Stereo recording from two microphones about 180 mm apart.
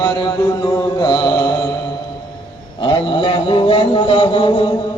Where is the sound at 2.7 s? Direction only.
30° left (ahead or behind).